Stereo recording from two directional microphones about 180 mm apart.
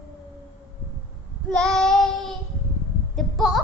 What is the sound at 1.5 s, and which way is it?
Child singing, 5° left (ahead or behind).